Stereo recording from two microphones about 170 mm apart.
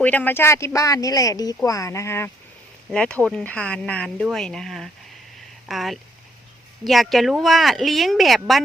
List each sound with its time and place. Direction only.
0.0 s speech: 10° left (ahead or behind)